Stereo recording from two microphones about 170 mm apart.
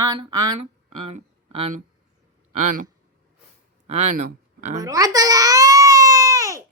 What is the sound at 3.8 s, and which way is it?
Speech, 40° right (ahead or behind).